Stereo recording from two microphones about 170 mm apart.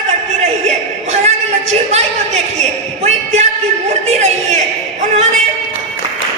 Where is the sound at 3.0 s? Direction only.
40° right (ahead or behind).